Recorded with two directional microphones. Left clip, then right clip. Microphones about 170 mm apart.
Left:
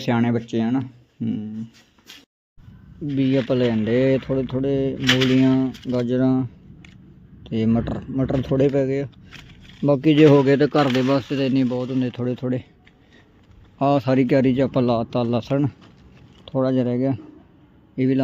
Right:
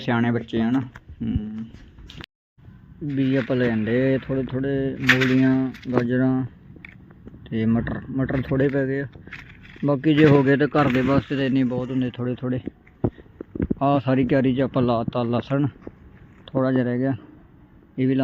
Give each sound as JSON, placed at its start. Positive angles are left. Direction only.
{"t": 0.0, "sound": "speech", "side_deg": 20}
{"t": 3.1, "sound": "speech", "side_deg": 20}
{"t": 13.7, "sound": "a man's voice", "side_deg": 25}